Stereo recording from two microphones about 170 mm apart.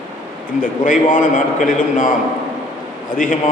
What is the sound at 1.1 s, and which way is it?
A man's voice, 50° left (ahead or behind).